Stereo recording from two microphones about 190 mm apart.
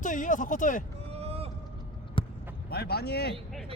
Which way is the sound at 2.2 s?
25° left (ahead or behind).